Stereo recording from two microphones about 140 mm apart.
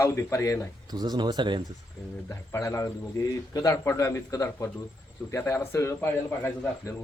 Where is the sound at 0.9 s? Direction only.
30° right (ahead or behind).